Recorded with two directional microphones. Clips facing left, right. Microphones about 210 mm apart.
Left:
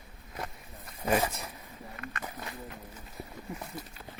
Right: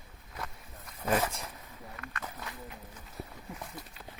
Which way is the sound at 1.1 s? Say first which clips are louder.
Left 2 dB; 10° left (ahead or behind).